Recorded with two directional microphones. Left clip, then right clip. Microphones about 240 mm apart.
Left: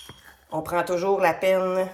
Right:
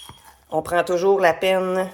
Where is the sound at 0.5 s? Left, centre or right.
Right.